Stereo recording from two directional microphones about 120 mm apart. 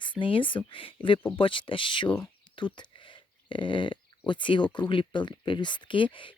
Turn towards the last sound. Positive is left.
turn(degrees=45)  # may be behind; listen again after turning